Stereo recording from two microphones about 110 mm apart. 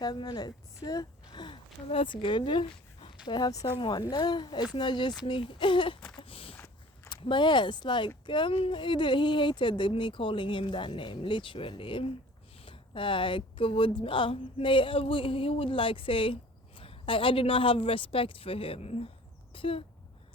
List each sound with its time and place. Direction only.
0.0 s speech: 40° left (ahead or behind)
1.9 s speech: 55° left (ahead or behind)
2.2 s speech: 45° left (ahead or behind)
6.1 s a sound: 55° left (ahead or behind)
7.1 s speech: 45° left (ahead or behind); by 18.9 s 65° left (ahead or behind)
19.5 s speech: 55° left (ahead or behind)